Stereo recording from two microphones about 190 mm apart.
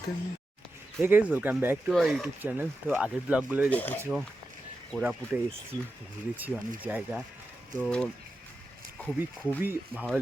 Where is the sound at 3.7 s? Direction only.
10° left (ahead or behind).